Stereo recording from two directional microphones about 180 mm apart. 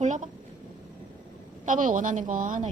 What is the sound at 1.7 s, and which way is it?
A woman's voice, 45° right (ahead or behind).